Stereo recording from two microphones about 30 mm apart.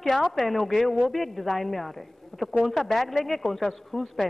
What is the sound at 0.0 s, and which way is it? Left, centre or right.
A woman's voice, centre.